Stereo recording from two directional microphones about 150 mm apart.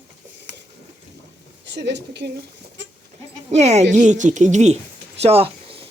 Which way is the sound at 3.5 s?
50° right (ahead or behind).